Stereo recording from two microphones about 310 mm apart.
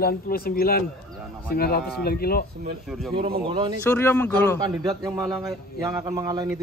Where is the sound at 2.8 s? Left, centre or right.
Centre.